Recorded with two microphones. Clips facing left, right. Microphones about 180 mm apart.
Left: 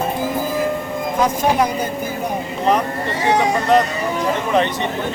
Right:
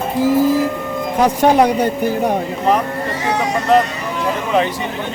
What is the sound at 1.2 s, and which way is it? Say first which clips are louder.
Speech: right 5 dB; 70° right (ahead or behind).